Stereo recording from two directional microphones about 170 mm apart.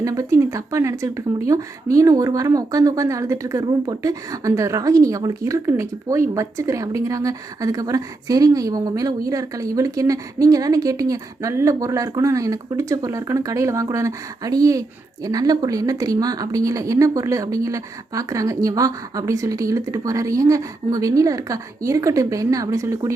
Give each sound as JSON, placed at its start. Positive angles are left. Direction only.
{"t": 0.0, "sound": "speech", "side_deg": -20}